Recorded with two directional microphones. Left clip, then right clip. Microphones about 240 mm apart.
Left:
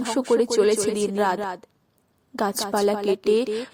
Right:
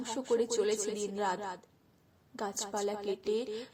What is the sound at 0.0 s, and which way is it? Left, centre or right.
A woman's voice, left.